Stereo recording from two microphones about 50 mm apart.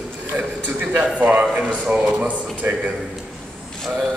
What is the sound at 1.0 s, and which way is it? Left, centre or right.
Speech, right.